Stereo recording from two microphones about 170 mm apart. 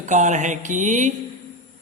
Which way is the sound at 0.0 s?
45° right (ahead or behind).